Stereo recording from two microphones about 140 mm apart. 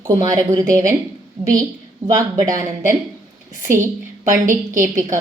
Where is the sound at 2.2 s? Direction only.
25° right (ahead or behind).